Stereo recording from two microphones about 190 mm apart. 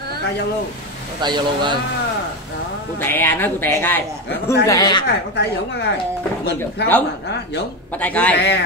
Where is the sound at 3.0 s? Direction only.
10° left (ahead or behind).